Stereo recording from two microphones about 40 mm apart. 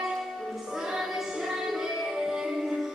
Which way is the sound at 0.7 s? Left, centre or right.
Centre.